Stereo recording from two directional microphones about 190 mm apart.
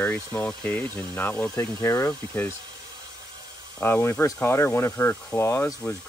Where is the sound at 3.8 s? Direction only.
10° left (ahead or behind).